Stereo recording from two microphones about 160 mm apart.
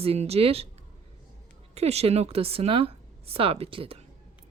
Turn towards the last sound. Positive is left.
turn(degrees=-35)  # may be behind; listen again after turning